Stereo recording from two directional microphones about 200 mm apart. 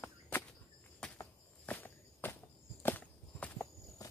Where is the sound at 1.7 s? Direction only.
10° left (ahead or behind).